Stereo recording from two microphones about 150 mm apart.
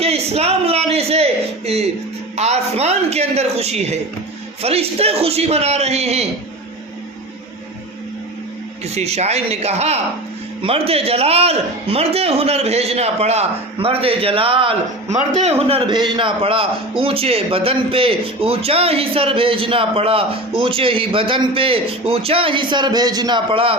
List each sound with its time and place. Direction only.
0.0 s a sound: 45° right (ahead or behind)
2.3 s a man's voice: 45° right (ahead or behind)
9.0 s a man's voice: 45° right (ahead or behind)
15.1 s a man's voice: 50° right (ahead or behind)